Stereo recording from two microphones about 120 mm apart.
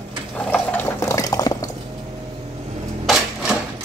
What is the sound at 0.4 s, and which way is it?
Water, 15° left (ahead or behind).